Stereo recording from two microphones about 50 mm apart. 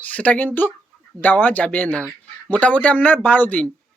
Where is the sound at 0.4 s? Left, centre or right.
Left.